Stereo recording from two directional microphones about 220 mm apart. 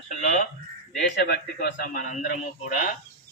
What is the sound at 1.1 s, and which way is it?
A man's voice, 50° left (ahead or behind).